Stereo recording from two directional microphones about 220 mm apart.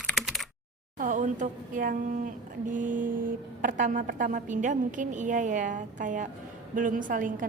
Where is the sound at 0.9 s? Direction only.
35° right (ahead or behind).